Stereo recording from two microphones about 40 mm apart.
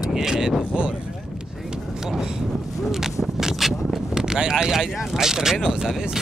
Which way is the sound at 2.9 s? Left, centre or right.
Centre.